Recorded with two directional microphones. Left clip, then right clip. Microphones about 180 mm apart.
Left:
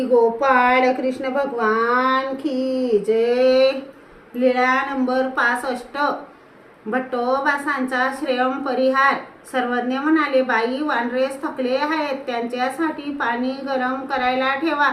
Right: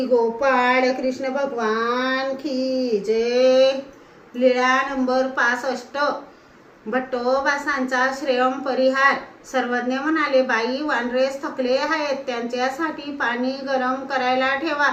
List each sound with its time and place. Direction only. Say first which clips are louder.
0.1 s a woman's voice: left 3 dB; 15° left (ahead or behind)